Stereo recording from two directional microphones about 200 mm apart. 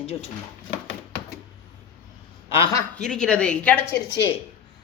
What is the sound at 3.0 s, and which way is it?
Speech, 5° left (ahead or behind).